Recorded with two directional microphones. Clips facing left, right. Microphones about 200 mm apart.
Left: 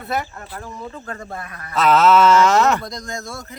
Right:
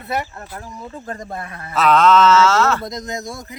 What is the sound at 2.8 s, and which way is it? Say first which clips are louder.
Speech: right 3 dB; 20° right (ahead or behind).